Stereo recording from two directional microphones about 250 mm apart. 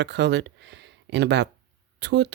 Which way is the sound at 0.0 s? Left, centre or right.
Right.